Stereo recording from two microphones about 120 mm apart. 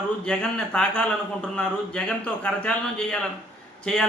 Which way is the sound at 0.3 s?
5° left (ahead or behind).